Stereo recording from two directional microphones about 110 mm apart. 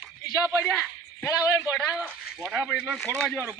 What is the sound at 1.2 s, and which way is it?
Speech, 30° left (ahead or behind).